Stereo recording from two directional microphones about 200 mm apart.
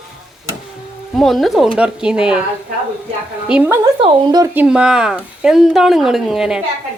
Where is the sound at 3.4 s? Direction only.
5° right (ahead or behind).